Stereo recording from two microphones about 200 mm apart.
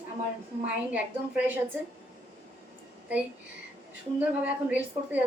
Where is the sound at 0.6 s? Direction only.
5° right (ahead or behind).